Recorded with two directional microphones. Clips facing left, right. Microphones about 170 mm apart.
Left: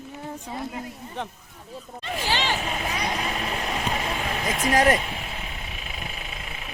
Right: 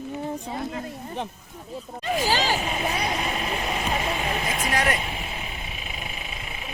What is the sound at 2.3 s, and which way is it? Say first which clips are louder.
Speech: right 1 dB; 40° right (ahead or behind).